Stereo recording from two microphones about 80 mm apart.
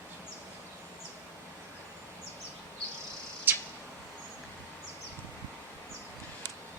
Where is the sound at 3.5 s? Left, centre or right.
Right.